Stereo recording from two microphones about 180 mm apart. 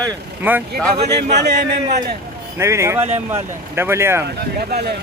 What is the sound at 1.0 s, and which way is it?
Speech, 65° right (ahead or behind).